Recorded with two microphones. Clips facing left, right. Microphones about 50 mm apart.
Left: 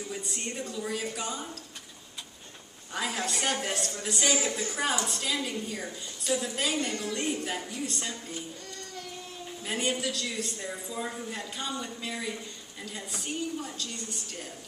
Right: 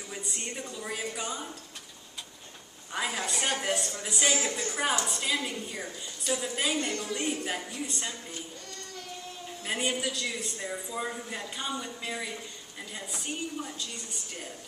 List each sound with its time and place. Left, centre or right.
0.1 s a man's voice: centre
2.9 s a woman's voice: centre
9.7 s a man's voice: centre